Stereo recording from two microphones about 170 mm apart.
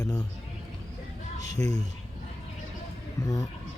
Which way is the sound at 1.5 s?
20° left (ahead or behind).